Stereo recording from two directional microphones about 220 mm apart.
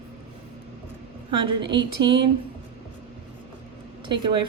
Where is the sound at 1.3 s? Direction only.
20° right (ahead or behind).